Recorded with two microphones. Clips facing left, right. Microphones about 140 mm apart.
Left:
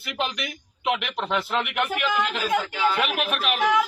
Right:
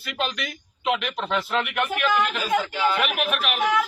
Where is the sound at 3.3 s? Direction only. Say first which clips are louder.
Even; 35° left (ahead or behind).